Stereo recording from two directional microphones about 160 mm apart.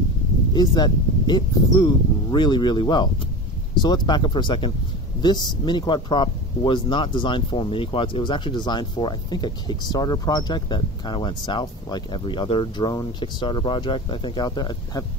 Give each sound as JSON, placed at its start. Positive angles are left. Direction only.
{"t": 0.6, "sound": "speech", "side_deg": 25}